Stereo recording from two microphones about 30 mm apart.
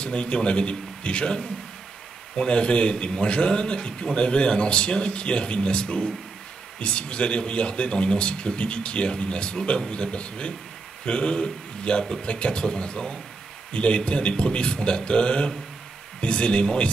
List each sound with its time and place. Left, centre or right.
0.0 s a man's voice: left